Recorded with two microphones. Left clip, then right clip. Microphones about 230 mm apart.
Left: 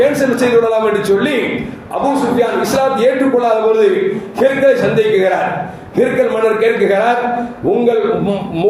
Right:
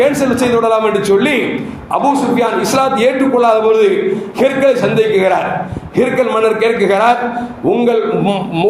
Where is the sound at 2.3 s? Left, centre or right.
Right.